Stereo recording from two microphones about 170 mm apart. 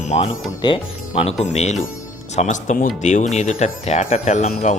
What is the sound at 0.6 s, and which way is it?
Speech, 25° left (ahead or behind).